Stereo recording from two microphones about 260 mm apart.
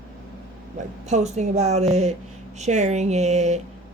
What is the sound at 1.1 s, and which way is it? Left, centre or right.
Speech, right.